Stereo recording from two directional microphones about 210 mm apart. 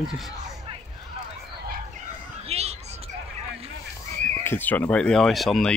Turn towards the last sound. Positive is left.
turn(degrees=0)  # may be behind; listen again after turning